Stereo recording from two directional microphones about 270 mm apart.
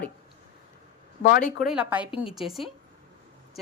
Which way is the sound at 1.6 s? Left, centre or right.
Centre.